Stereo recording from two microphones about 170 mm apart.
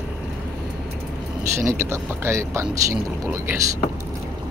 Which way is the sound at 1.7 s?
15° right (ahead or behind).